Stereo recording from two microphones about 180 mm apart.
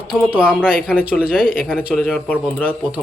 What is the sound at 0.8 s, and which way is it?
Speech, 5° right (ahead or behind).